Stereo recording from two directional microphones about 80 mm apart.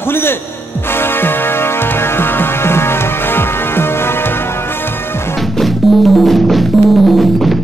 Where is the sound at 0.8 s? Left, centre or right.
Left.